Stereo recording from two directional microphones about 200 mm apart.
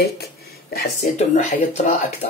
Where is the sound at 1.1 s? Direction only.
35° left (ahead or behind).